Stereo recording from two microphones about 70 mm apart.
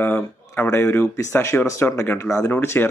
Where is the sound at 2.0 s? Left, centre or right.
Left.